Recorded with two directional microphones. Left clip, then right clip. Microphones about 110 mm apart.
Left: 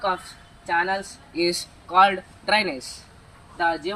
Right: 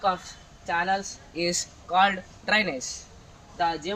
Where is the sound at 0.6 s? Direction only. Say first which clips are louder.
Left 3 dB; 25° right (ahead or behind).